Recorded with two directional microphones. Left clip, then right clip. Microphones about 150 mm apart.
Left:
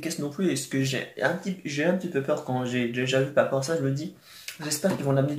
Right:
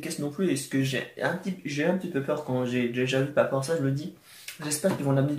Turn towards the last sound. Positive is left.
turn(degrees=10)  # may be behind; listen again after turning